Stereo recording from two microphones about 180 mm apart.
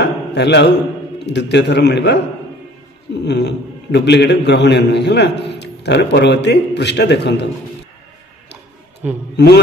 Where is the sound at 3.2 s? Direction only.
70° left (ahead or behind).